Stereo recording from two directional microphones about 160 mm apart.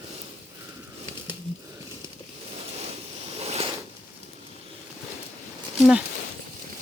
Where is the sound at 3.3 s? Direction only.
40° right (ahead or behind).